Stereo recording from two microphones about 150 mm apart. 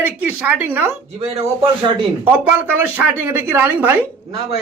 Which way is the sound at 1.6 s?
35° right (ahead or behind).